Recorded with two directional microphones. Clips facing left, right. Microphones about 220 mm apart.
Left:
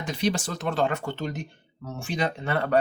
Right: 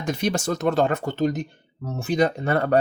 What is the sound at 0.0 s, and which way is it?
Speech, 45° right (ahead or behind).